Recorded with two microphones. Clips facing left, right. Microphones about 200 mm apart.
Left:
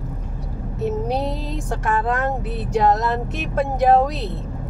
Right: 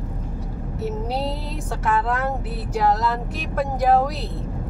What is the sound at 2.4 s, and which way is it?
Speech, 20° left (ahead or behind).